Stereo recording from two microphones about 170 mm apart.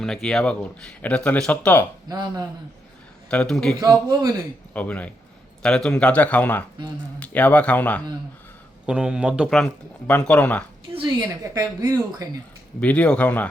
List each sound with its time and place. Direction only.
0.0 s speech: 5° left (ahead or behind)
2.0 s a woman's voice: 25° right (ahead or behind)
3.2 s speech: 5° left (ahead or behind)
3.8 s a woman's voice: 20° right (ahead or behind)
4.7 s speech: 10° left (ahead or behind)
8.9 s speech: 5° right (ahead or behind)
10.9 s a woman's voice: 25° right (ahead or behind)
12.8 s speech: 10° left (ahead or behind)